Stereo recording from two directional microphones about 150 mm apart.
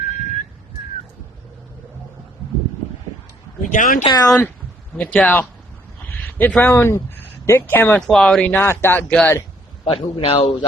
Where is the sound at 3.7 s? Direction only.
60° left (ahead or behind).